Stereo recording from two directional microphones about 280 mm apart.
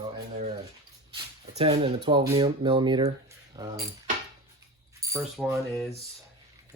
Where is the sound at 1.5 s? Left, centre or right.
Centre.